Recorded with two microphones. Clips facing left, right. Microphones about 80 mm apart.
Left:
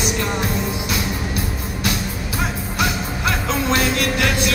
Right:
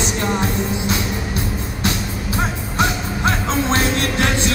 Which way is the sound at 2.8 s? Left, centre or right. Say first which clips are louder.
Right 3 dB; right.